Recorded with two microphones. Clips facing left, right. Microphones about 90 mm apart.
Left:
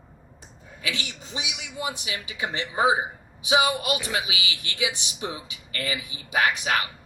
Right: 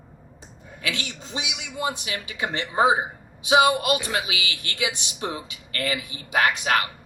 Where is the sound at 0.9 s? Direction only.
15° left (ahead or behind).